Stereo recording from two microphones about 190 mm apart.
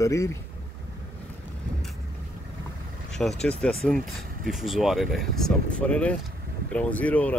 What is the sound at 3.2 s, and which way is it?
Speech, 5° left (ahead or behind).